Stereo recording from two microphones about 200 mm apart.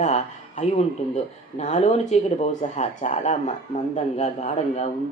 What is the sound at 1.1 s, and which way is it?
A woman's voice, 35° left (ahead or behind).